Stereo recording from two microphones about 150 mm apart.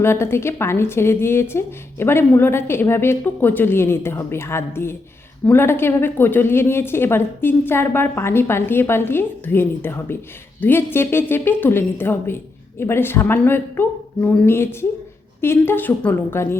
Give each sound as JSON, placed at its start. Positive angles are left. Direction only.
{"t": 0.0, "sound": "a woman's voice", "side_deg": 15}